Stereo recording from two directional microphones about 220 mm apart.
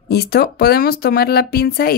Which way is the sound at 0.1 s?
45° left (ahead or behind).